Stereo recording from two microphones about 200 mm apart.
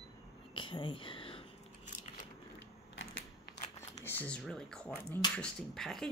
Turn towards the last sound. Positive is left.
turn(degrees=0)  # may be behind; listen again after turning